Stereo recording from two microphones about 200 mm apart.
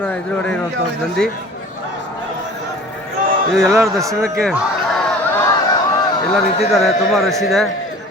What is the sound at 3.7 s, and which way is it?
Speech, 15° right (ahead or behind).